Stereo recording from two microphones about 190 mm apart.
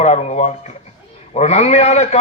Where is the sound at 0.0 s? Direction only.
35° left (ahead or behind).